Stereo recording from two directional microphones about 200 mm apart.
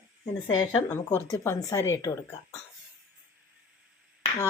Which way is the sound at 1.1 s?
15° left (ahead or behind).